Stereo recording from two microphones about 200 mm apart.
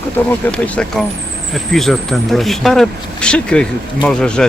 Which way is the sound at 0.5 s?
5° left (ahead or behind).